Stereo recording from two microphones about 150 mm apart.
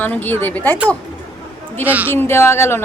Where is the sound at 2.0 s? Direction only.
15° left (ahead or behind).